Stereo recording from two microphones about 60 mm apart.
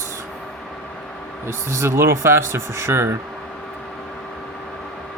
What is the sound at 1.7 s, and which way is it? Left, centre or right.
Speech, right.